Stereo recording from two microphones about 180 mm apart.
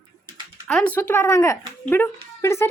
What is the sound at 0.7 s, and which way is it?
Speech, 5° left (ahead or behind).